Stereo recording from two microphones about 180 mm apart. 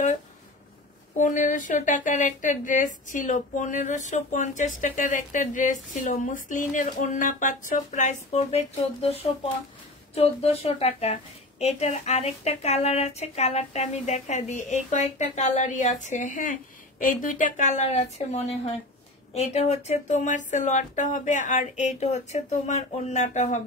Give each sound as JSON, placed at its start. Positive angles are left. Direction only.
{"t": 1.1, "sound": "a woman's voice", "side_deg": 45}